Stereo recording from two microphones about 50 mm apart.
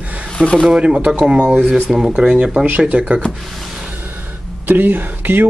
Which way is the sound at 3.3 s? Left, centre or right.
Centre.